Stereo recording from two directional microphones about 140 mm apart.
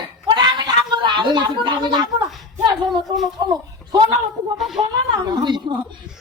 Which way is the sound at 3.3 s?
30° right (ahead or behind).